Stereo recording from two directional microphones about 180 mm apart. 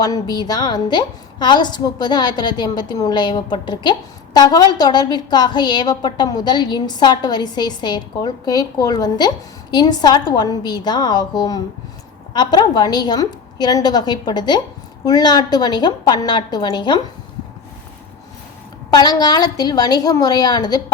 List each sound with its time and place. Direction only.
0.0 s a woman's voice: 20° left (ahead or behind)
18.9 s a woman's voice: 20° left (ahead or behind)